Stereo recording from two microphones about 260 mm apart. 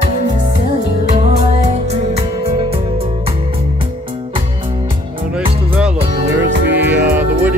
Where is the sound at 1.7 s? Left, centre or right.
Right.